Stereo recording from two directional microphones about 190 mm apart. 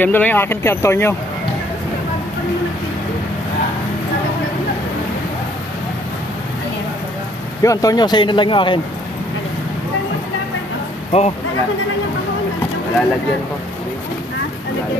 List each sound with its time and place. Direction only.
0.0 s speech: 10° left (ahead or behind)
7.6 s speech: 20° left (ahead or behind)
11.1 s speech: 30° left (ahead or behind)